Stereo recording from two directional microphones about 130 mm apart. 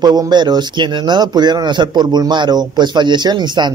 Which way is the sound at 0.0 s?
35° right (ahead or behind).